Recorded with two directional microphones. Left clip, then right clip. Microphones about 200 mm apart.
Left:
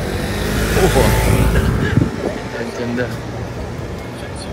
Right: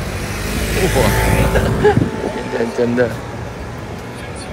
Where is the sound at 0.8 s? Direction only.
5° left (ahead or behind).